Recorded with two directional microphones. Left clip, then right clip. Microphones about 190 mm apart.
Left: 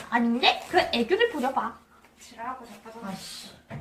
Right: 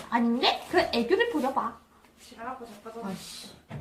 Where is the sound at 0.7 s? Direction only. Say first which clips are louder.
Left 1 dB; centre (ahead or behind).